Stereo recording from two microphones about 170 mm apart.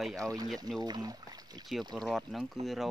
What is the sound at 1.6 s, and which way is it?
Speech, centre (ahead or behind).